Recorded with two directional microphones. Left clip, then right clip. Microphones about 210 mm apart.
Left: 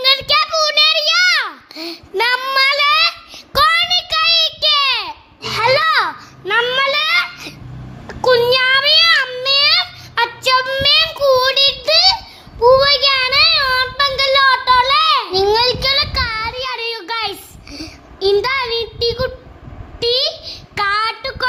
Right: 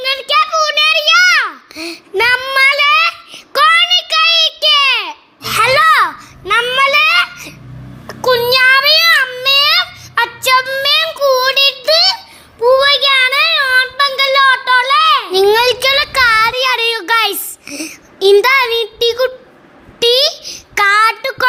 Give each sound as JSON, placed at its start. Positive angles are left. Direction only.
{"t": 0.0, "sound": "a sound", "side_deg": 5}
{"t": 8.0, "sound": "child singing", "side_deg": 0}
{"t": 15.3, "sound": "child singing", "side_deg": -15}